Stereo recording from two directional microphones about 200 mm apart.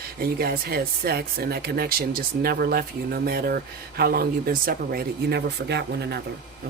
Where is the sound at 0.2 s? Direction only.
50° right (ahead or behind).